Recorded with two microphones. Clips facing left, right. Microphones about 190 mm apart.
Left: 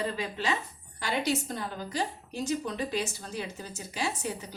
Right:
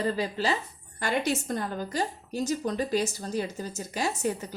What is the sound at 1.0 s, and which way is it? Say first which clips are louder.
A woman's voice: right 2 dB; 50° right (ahead or behind).